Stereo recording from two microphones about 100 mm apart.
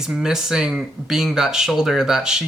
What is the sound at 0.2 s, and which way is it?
Speech, 5° right (ahead or behind).